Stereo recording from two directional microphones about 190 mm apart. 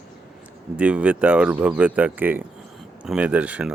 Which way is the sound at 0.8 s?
5° right (ahead or behind).